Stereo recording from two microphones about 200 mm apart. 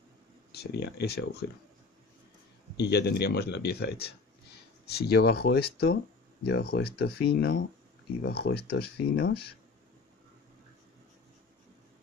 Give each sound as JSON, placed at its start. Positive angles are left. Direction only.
{"t": 0.5, "sound": "speech", "side_deg": 55}
{"t": 2.8, "sound": "speech", "side_deg": 55}